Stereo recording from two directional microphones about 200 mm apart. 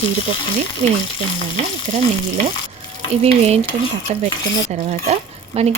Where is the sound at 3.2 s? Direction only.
30° right (ahead or behind).